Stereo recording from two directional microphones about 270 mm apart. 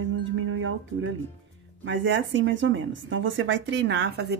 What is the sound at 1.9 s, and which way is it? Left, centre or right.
Speech, right.